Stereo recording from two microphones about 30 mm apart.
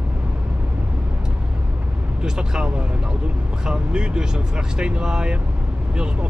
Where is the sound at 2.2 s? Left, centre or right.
Right.